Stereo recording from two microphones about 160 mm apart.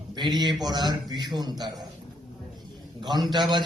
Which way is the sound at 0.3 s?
25° right (ahead or behind).